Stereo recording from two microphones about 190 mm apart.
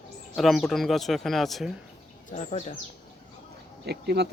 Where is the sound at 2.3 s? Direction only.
35° left (ahead or behind).